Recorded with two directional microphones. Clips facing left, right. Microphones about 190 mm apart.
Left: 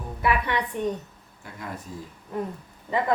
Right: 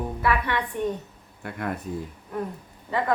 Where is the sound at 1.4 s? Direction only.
60° right (ahead or behind).